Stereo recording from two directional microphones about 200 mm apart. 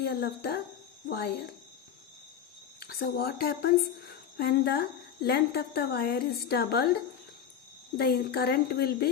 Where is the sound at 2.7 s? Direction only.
50° left (ahead or behind).